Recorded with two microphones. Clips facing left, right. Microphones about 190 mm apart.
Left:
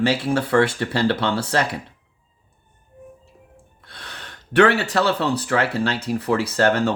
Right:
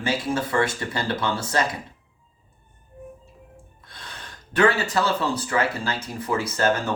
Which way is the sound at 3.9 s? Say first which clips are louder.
Left 2 dB; 70° left (ahead or behind).